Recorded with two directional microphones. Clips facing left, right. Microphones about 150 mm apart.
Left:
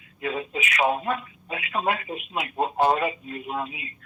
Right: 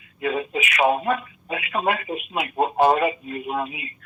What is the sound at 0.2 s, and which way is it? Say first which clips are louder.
Speech: right 4 dB; 65° right (ahead or behind).